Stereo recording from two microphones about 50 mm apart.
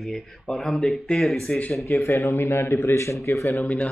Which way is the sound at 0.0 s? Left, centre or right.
Centre.